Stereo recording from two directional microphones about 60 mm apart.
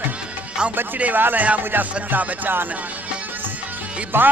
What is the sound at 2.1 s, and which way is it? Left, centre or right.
Speech, right.